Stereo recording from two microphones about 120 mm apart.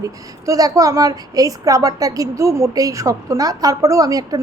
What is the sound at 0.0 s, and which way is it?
A woman's voice, 30° right (ahead or behind).